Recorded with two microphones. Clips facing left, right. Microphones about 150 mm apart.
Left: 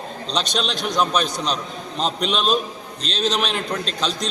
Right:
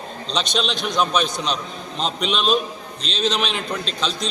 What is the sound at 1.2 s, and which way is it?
A man's voice, 40° left (ahead or behind).